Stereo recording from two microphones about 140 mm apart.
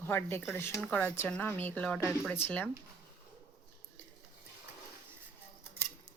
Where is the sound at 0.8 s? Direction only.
5° left (ahead or behind).